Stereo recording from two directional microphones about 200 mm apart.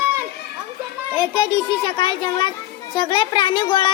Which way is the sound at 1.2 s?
20° left (ahead or behind).